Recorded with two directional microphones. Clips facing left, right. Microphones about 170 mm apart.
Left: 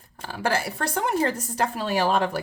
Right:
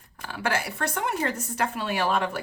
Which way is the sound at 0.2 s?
35° left (ahead or behind).